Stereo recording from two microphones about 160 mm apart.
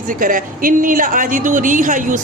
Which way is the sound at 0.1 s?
60° right (ahead or behind).